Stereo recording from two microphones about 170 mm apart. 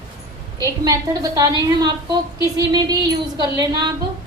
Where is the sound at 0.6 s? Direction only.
20° right (ahead or behind).